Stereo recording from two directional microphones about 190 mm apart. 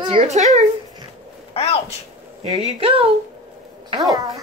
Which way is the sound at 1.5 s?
30° left (ahead or behind).